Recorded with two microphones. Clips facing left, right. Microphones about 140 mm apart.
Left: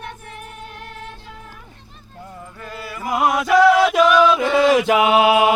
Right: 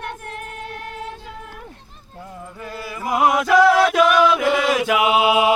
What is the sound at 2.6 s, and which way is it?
Music, 10° right (ahead or behind).